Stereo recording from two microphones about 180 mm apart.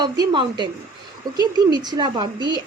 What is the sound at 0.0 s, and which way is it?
A woman's voice, 25° right (ahead or behind).